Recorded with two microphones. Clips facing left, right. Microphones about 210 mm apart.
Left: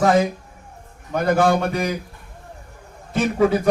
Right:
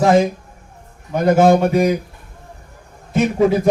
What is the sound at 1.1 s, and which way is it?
Speech, 15° right (ahead or behind).